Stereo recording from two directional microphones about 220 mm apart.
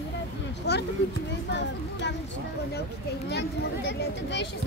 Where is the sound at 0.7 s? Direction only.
50° left (ahead or behind).